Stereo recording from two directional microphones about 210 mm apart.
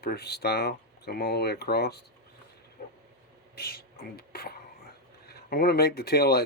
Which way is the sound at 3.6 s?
45° left (ahead or behind).